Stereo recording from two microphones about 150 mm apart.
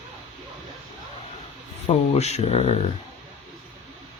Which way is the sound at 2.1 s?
45° left (ahead or behind).